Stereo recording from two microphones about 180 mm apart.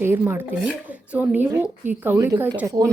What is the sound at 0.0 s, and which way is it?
Speech, 15° right (ahead or behind).